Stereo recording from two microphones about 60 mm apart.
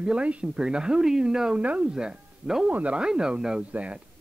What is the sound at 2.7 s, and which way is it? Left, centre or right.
Speech, right.